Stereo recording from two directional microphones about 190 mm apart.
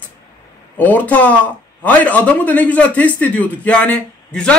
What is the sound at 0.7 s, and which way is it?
A man's voice, 10° left (ahead or behind).